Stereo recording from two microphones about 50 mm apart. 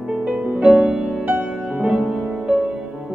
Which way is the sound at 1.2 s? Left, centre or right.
Right.